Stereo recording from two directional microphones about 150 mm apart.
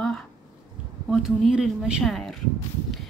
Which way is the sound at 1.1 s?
Centre (ahead or behind).